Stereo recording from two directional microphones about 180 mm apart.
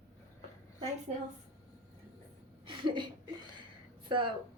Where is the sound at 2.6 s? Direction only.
25° right (ahead or behind).